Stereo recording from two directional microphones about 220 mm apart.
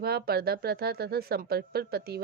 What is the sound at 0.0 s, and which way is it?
Speech, 45° right (ahead or behind).